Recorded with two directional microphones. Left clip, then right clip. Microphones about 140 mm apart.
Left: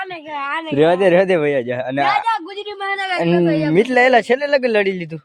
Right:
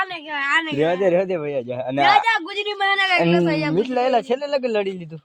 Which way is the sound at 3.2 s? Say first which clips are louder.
Left 2 dB; 10° left (ahead or behind).